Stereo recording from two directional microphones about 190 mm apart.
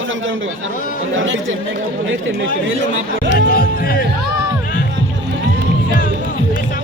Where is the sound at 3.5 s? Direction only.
50° left (ahead or behind).